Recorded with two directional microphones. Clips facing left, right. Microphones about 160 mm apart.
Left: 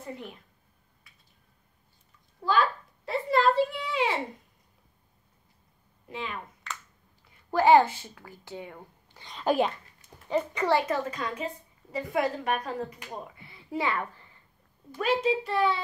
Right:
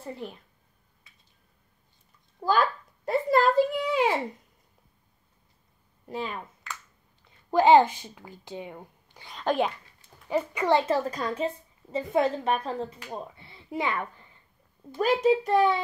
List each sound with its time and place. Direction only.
2.4 s a child's voice: 35° right (ahead or behind)
3.1 s a sound: 45° right (ahead or behind)
6.0 s speech: 40° right (ahead or behind)
6.7 s a sound: centre (ahead or behind)
7.2 s a woman's voice: 20° right (ahead or behind)
9.3 s speech: centre (ahead or behind)
10.3 s a child's voice: 10° right (ahead or behind)
10.7 s a woman's voice: 25° right (ahead or behind)
11.1 s a woman's voice: 35° right (ahead or behind); by 14.2 s 20° right (ahead or behind)
15.2 s a child's voice: 45° right (ahead or behind)